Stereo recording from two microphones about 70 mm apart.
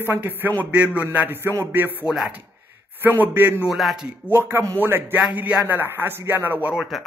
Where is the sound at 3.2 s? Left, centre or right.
Right.